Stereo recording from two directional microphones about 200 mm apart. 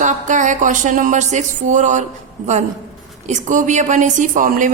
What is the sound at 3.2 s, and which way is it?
A woman's voice, 40° right (ahead or behind).